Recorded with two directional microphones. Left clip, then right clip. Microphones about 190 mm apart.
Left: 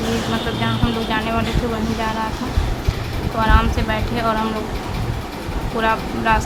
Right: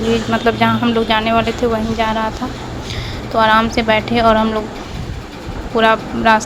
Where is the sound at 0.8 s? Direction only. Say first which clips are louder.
Right 6 dB; 30° right (ahead or behind).